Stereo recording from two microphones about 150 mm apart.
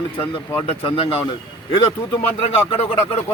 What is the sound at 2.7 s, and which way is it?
Speech, 40° left (ahead or behind).